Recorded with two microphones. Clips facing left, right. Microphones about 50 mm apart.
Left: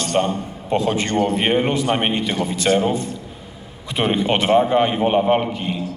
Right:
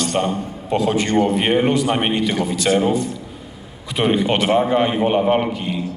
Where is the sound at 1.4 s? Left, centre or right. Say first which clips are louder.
Right 2 dB; left.